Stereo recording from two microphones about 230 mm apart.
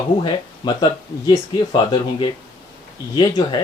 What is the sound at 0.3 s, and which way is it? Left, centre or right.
Speech, centre.